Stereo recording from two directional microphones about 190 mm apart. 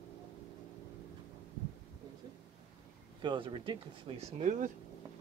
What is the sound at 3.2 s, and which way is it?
Speech, 25° right (ahead or behind).